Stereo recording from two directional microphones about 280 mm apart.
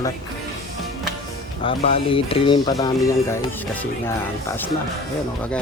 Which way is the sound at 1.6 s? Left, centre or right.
Centre.